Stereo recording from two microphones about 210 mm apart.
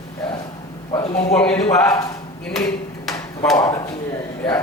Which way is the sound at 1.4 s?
5° left (ahead or behind).